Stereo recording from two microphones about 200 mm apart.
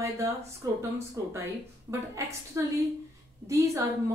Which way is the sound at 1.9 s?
15° right (ahead or behind).